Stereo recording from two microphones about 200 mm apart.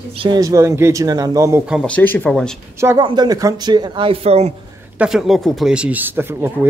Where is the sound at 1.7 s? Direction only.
Centre (ahead or behind).